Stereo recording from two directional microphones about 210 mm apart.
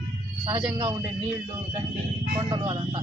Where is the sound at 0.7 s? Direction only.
15° right (ahead or behind).